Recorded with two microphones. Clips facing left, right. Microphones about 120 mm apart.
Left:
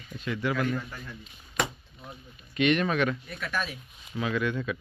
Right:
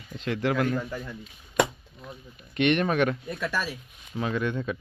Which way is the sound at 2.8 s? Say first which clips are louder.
Right 2 dB; 45° right (ahead or behind).